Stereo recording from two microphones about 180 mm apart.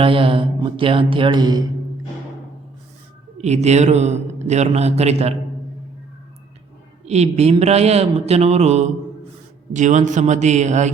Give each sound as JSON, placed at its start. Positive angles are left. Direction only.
{"t": 0.0, "sound": "speech", "side_deg": -30}
{"t": 3.3, "sound": "a man's voice", "side_deg": -40}
{"t": 7.0, "sound": "a man's voice", "side_deg": -35}